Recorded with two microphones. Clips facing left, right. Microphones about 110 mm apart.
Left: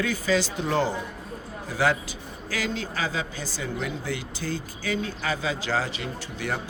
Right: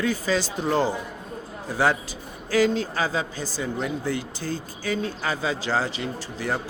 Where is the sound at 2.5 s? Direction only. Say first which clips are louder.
Right 9 dB; 40° right (ahead or behind).